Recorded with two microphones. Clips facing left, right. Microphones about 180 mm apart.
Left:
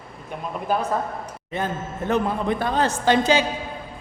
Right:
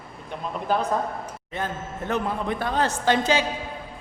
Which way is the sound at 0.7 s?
10° left (ahead or behind).